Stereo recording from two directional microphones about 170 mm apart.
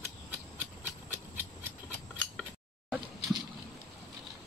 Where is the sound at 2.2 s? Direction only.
5° right (ahead or behind).